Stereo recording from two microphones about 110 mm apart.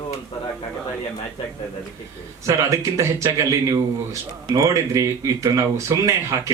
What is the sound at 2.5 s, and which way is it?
A man's voice, 30° right (ahead or behind).